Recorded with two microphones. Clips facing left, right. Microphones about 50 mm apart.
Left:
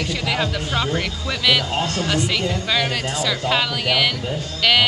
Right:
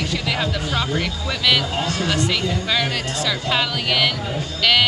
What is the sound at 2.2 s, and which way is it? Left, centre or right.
Speech, centre.